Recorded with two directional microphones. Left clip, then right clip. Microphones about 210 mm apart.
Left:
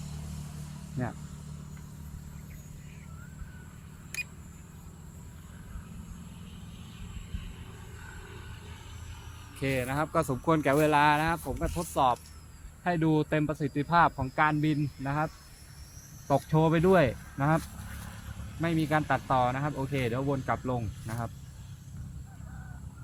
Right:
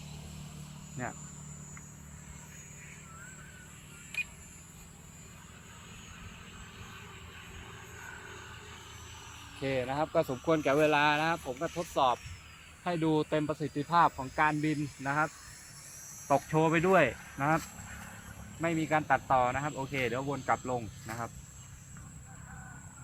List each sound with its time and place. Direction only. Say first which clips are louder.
1.0 s speech: left 2 dB; 50° left (ahead or behind)
8.0 s a sound: right 2 dB; 45° right (ahead or behind)
9.6 s speech: left 1 dB; 10° left (ahead or behind); by 15.2 s 50° left (ahead or behind)
16.3 s speech: left 1 dB; 50° left (ahead or behind)
18.6 s speech: left 1 dB; 55° left (ahead or behind)